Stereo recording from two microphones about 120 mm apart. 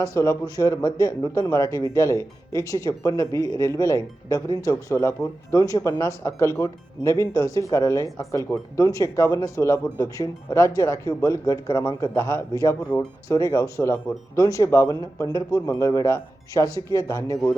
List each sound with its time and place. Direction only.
0.0 s speech: 25° left (ahead or behind)